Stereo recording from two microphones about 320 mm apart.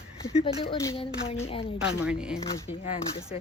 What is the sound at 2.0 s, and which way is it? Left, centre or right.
Speech, centre.